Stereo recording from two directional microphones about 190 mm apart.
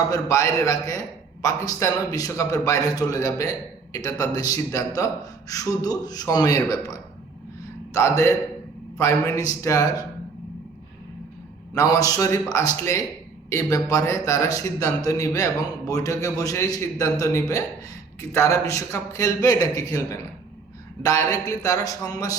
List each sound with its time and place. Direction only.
0.1 s a man's voice: 15° left (ahead or behind)
11.7 s a man's voice: 20° left (ahead or behind)